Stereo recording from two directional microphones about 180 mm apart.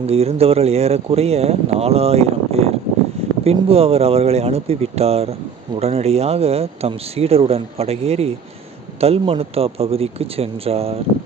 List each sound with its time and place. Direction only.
0.1 s speech: 35° right (ahead or behind)